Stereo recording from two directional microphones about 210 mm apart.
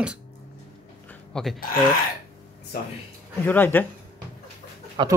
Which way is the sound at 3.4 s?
10° left (ahead or behind).